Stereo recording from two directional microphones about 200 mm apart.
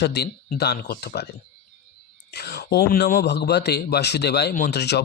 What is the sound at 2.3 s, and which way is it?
A man's voice, 55° left (ahead or behind).